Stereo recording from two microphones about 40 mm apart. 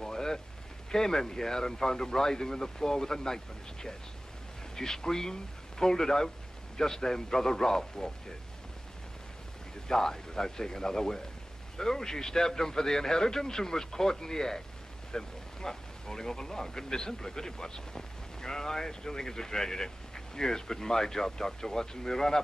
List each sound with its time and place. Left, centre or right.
0.0 s a sound: centre
0.9 s speech: centre
4.7 s speech: centre
9.8 s speech: centre